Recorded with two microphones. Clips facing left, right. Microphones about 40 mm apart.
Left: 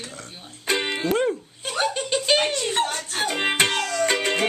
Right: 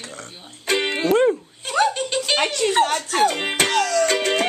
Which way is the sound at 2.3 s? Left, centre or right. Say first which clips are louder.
Right 1 dB; right.